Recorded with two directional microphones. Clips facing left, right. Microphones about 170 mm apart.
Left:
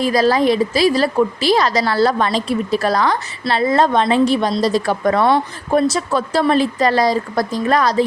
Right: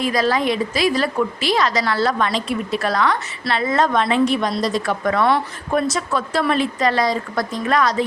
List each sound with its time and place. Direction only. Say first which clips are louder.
0.0 s a woman's voice: left 4 dB; 35° left (ahead or behind)